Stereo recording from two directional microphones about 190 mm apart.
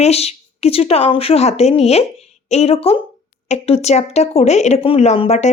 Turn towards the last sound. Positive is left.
turn(degrees=35)  # may be behind; listen again after turning